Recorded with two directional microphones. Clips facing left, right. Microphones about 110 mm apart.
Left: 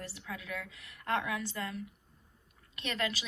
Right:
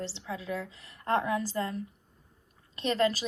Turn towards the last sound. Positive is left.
turn(degrees=-35)  # may be behind; listen again after turning